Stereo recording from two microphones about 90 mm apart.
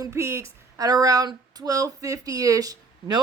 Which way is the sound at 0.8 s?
45° right (ahead or behind).